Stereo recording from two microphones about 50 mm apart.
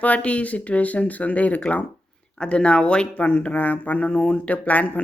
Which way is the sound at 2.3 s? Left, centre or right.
Centre.